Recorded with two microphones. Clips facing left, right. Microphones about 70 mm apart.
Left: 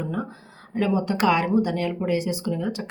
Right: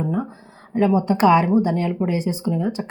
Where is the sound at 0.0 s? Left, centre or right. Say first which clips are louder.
Right 5 dB; right.